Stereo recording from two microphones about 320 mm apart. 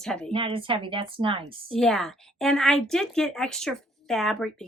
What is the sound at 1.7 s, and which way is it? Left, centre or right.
A woman's voice, centre.